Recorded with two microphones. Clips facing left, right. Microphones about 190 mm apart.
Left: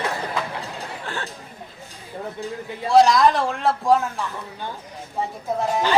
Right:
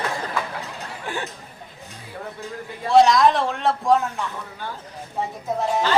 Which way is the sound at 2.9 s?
Centre (ahead or behind).